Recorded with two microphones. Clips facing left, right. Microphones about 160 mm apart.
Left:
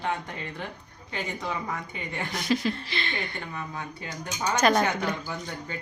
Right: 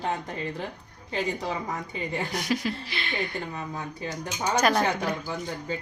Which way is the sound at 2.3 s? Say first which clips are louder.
Left 6 dB; 10° right (ahead or behind).